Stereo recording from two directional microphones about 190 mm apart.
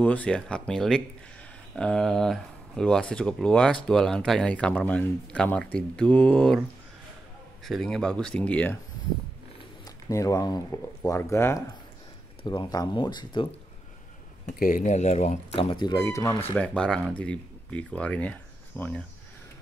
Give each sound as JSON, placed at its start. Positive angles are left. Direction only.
{"t": 0.0, "sound": "speech", "side_deg": 5}
{"t": 7.6, "sound": "speech", "side_deg": 0}
{"t": 10.0, "sound": "speech", "side_deg": 15}
{"t": 14.4, "sound": "speech", "side_deg": 50}
{"t": 16.5, "sound": "speech", "side_deg": 5}